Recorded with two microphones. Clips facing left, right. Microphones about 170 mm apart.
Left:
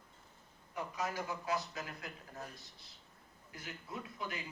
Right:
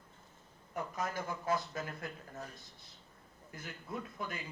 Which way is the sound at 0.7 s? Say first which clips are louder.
Right 1 dB; 50° right (ahead or behind).